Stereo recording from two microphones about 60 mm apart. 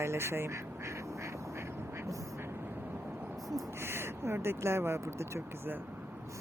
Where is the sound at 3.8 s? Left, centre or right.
Right.